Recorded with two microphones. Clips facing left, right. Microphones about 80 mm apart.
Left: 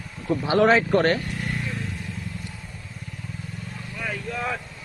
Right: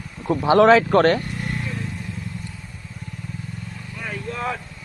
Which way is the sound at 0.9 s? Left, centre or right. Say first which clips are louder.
Right 4 dB; right.